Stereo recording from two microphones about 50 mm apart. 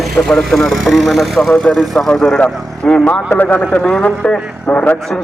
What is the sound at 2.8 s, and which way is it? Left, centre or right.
Speech, left.